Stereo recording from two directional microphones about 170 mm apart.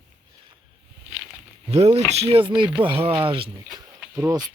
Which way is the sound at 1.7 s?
40° right (ahead or behind).